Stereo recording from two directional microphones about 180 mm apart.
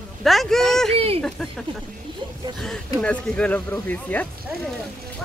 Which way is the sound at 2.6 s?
5° left (ahead or behind).